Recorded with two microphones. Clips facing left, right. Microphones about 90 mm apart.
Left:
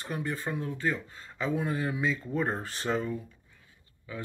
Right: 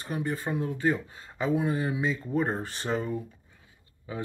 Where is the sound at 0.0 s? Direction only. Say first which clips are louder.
Right 2 dB; 5° right (ahead or behind).